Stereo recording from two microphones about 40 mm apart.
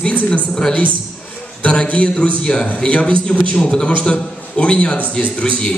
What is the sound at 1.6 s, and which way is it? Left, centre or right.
A man's voice, left.